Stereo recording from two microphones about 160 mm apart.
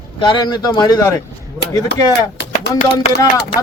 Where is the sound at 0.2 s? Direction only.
30° left (ahead or behind).